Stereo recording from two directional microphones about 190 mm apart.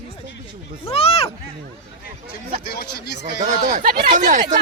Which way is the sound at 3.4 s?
40° right (ahead or behind).